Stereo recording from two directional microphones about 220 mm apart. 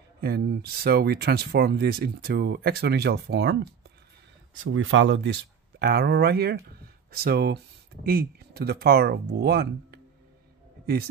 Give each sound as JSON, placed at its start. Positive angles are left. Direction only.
{"t": 0.2, "sound": "speech", "side_deg": -45}
{"t": 4.6, "sound": "speech", "side_deg": -65}